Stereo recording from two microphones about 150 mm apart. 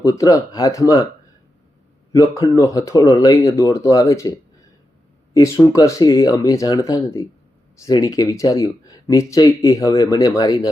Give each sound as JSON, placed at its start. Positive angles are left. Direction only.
{"t": 0.0, "sound": "speech", "side_deg": 20}
{"t": 2.1, "sound": "speech", "side_deg": 25}